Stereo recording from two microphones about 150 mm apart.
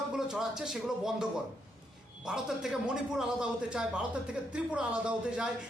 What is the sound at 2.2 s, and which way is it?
A man's voice, 5° right (ahead or behind).